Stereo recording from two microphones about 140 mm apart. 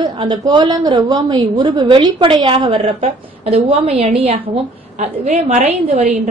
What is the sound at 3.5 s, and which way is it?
A woman's voice, 50° right (ahead or behind).